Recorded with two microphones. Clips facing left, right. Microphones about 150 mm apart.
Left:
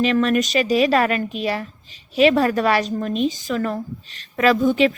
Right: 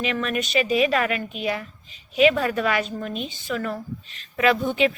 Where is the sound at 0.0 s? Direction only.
40° left (ahead or behind).